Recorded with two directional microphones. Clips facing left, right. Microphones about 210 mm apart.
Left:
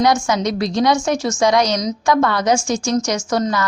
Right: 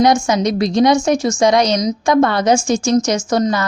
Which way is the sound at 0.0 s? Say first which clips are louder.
Right 3 dB; 20° right (ahead or behind).